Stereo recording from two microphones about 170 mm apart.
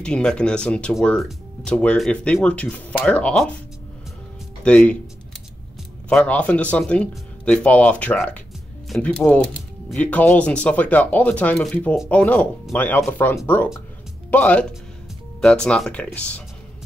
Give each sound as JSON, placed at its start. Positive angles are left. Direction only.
{"t": 0.0, "sound": "speech", "side_deg": 5}
{"t": 4.6, "sound": "speech", "side_deg": 5}
{"t": 6.0, "sound": "speech", "side_deg": 5}